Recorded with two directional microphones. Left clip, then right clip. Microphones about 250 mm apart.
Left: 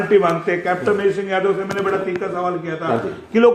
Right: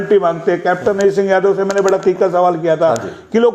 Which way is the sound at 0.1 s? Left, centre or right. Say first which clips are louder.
Right 3 dB; right.